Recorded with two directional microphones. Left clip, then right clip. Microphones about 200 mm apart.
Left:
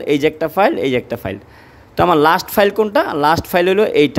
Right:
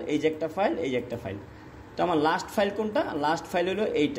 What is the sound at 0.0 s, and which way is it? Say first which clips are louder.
Speech: left 11 dB; 50° left (ahead or behind).